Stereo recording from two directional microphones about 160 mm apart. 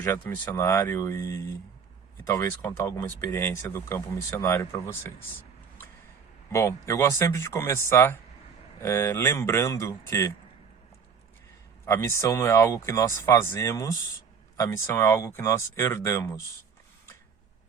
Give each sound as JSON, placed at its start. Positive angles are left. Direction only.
{"t": 0.0, "sound": "speech", "side_deg": 10}
{"t": 6.5, "sound": "speech", "side_deg": 20}
{"t": 11.9, "sound": "speech", "side_deg": 15}